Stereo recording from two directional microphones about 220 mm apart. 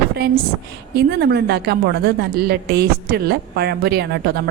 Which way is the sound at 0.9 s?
45° right (ahead or behind).